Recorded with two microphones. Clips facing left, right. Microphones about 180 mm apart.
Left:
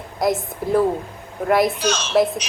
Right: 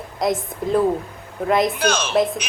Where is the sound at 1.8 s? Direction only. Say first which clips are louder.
Right 2 dB; 55° right (ahead or behind).